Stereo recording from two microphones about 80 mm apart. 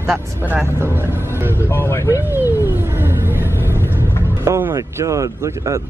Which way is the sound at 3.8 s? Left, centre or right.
Right.